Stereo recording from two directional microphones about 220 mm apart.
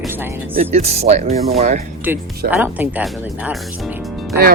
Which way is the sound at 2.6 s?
5° right (ahead or behind).